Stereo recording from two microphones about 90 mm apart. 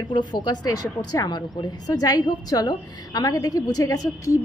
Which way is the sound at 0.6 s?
45° left (ahead or behind).